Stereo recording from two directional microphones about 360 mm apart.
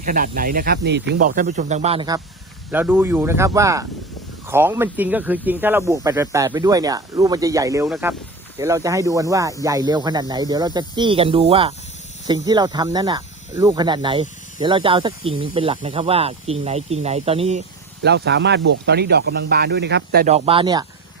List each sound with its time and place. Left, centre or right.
0.0 s speech: right
18.0 s speech: right; by 20.8 s centre